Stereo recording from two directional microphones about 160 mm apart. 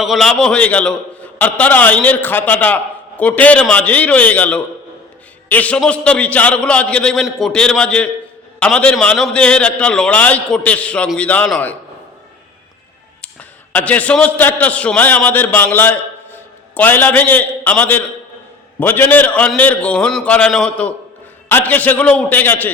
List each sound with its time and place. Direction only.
0.0 s a man's voice: centre (ahead or behind)
13.7 s a man's voice: 10° left (ahead or behind)